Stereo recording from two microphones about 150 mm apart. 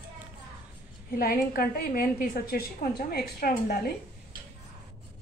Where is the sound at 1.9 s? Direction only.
75° left (ahead or behind); by 3.9 s 90° left.